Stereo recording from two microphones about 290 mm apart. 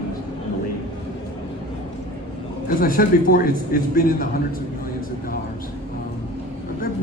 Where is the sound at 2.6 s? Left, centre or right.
Left.